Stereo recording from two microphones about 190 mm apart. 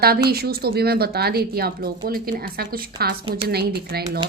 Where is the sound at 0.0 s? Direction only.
55° right (ahead or behind).